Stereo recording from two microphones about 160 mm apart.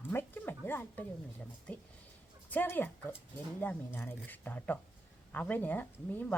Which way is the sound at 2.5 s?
10° left (ahead or behind).